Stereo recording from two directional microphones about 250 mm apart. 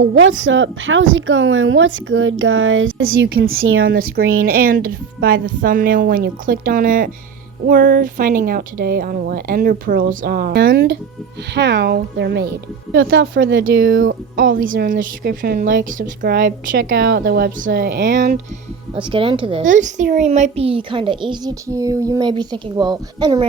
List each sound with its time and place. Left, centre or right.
0.0 s speech: right
3.8 s a woman's voice: right
18.9 s speech: centre